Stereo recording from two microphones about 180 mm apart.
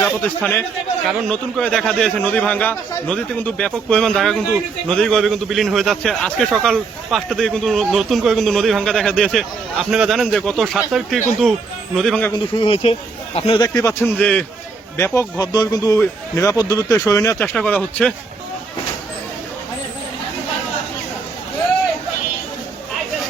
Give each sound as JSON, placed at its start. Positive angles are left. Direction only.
{"t": 0.0, "sound": "a man's voice", "side_deg": 10}
{"t": 12.5, "sound": "a man's voice", "side_deg": 30}